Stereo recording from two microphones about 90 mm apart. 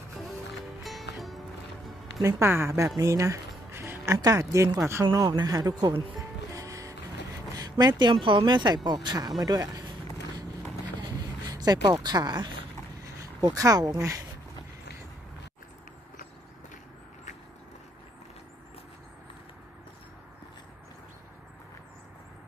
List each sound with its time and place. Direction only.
0.8 s music: centre (ahead or behind)
2.2 s speech: 25° right (ahead or behind)
3.0 s music: 35° right (ahead or behind)
4.2 s speech: 40° right (ahead or behind)
5.4 s speech: 45° right (ahead or behind)
6.5 s music: 40° right (ahead or behind)
7.5 s speech: 50° right (ahead or behind)
11.0 s a sound: 45° right (ahead or behind)
13.2 s speech: 40° right (ahead or behind)